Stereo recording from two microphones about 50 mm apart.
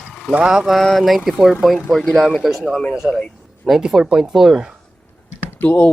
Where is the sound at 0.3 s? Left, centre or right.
Centre.